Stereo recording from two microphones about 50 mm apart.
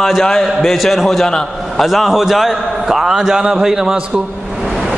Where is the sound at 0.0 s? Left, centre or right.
Centre.